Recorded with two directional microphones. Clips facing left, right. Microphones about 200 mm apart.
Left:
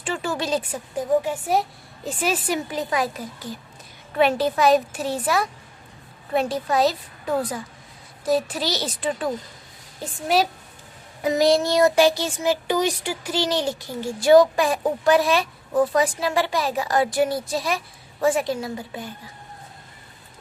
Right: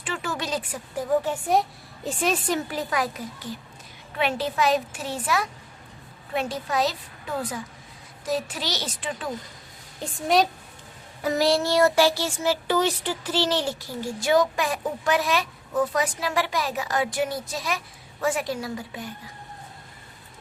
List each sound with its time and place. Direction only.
0.0 s a woman's voice: 30° left (ahead or behind); by 2.6 s 5° left (ahead or behind)
2.6 s a woman's voice: 20° left (ahead or behind)
4.2 s a woman's voice: 40° left (ahead or behind)
8.2 s a woman's voice: 35° left (ahead or behind)
10.0 s a woman's voice: 5° left (ahead or behind)
11.2 s speech: 20° left (ahead or behind)
14.2 s a woman's voice: 35° left (ahead or behind)